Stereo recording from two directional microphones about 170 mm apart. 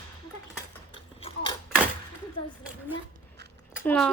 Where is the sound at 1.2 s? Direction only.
35° left (ahead or behind).